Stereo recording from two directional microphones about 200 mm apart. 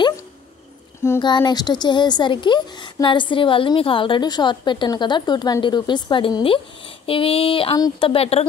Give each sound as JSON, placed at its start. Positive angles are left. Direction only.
{"t": 1.0, "sound": "a woman's voice", "side_deg": 15}